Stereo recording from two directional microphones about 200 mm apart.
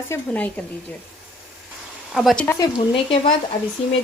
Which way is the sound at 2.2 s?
Centre (ahead or behind).